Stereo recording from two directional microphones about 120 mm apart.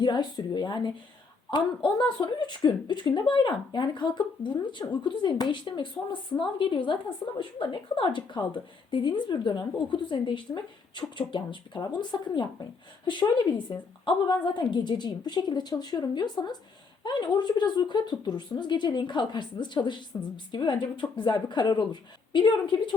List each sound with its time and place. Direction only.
0.0 s a woman's voice: 40° left (ahead or behind)